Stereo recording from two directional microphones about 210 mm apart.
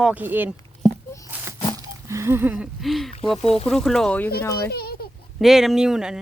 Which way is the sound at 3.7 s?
Centre (ahead or behind).